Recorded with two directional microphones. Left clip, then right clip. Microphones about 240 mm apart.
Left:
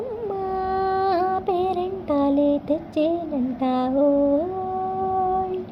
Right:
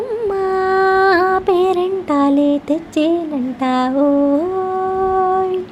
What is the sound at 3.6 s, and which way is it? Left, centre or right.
Speech, right.